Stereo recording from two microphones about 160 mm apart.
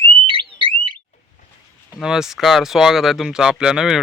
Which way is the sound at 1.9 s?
5° right (ahead or behind).